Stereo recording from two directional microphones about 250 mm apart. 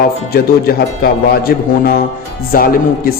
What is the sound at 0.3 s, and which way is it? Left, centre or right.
A man's voice, left.